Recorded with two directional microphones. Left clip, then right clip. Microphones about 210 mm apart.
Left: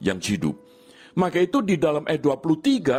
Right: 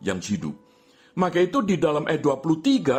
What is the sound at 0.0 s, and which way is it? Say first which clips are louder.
A man's voice: left 3 dB; 35° left (ahead or behind).